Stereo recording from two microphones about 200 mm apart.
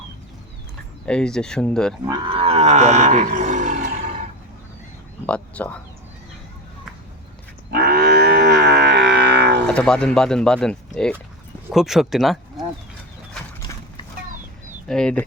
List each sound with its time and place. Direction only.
1.0 s speech: 5° left (ahead or behind)
2.0 s wild animals: 25° right (ahead or behind)
5.2 s speech: 5° left (ahead or behind)
7.7 s livestock: 50° right (ahead or behind)
9.6 s speech: 5° left (ahead or behind)
14.8 s speech: 5° left (ahead or behind)